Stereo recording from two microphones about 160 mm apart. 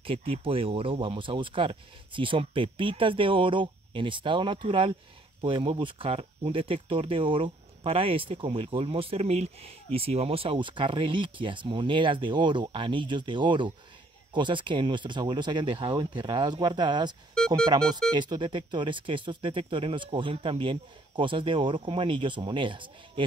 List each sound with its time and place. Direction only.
0.0 s speech: 35° right (ahead or behind)